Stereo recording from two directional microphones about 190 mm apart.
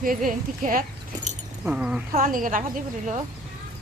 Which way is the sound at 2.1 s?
45° right (ahead or behind).